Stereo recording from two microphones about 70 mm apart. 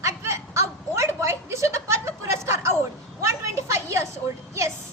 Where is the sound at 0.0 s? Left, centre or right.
Right.